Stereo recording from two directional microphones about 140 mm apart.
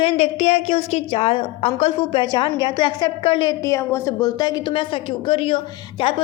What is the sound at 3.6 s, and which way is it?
A woman's voice, 20° left (ahead or behind).